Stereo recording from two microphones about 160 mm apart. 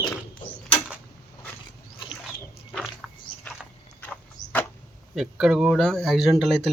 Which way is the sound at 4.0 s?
10° left (ahead or behind).